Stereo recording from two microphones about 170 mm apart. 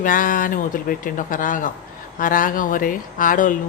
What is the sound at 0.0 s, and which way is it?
Speech, 55° left (ahead or behind).